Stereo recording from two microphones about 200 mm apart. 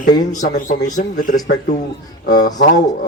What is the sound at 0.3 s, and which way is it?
Speech, 40° left (ahead or behind).